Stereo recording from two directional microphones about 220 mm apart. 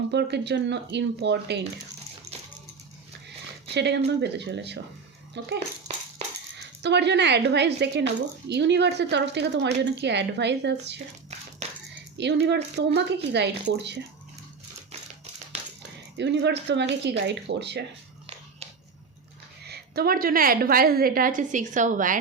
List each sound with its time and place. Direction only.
0.1 s a woman's voice: 50° right (ahead or behind)
2.3 s coin: 15° right (ahead or behind)
3.8 s a woman's voice: 50° right (ahead or behind)
12.1 s a child's voice: 50° right (ahead or behind)
16.1 s a woman's voice: 50° right (ahead or behind)
19.6 s a woman's voice: 45° right (ahead or behind)